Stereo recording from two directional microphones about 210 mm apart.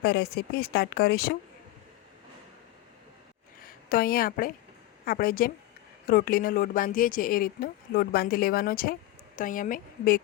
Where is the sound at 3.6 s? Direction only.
45° left (ahead or behind).